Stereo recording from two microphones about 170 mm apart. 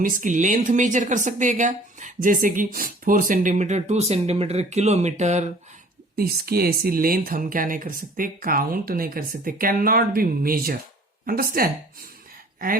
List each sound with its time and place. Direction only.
0.0 s speech: 50° right (ahead or behind)
6.1 s speech: 60° right (ahead or behind)